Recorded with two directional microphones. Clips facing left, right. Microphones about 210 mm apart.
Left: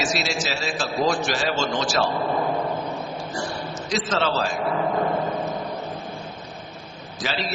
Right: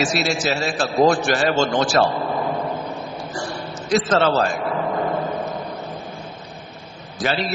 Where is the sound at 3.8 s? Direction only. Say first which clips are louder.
Right 7 dB; 55° right (ahead or behind).